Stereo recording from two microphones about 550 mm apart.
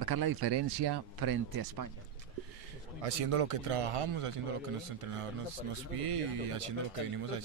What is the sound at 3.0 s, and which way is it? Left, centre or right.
A man's voice, right.